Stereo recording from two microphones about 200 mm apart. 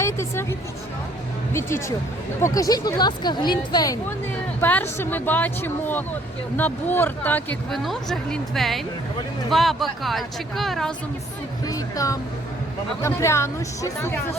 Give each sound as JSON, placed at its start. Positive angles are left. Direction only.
{"t": 0.0, "sound": "a sound", "side_deg": 15}
{"t": 2.4, "sound": "speech", "side_deg": 15}
{"t": 4.6, "sound": "a woman's voice", "side_deg": 10}
{"t": 11.6, "sound": "music", "side_deg": 15}
{"t": 13.0, "sound": "a woman's voice", "side_deg": 15}